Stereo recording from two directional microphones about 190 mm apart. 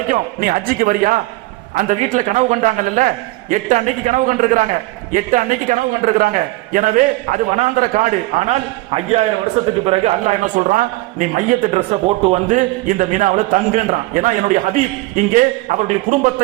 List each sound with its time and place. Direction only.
0.1 s a man's voice: 50° right (ahead or behind)